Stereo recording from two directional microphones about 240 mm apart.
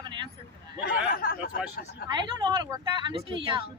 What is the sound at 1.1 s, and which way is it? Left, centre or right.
Speech, left.